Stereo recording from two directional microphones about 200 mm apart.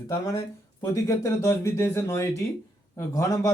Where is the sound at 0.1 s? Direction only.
15° left (ahead or behind).